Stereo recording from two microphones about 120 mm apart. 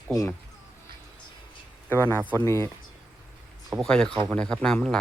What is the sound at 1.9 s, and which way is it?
Speech, 20° left (ahead or behind).